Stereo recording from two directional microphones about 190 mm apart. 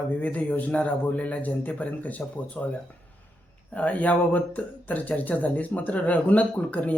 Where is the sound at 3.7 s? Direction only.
5° left (ahead or behind).